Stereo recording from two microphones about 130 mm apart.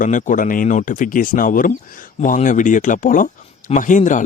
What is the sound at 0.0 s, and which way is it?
Speech, 80° left.